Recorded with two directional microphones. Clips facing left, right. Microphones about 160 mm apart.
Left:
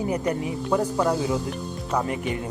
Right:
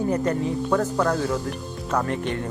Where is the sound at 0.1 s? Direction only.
10° left (ahead or behind).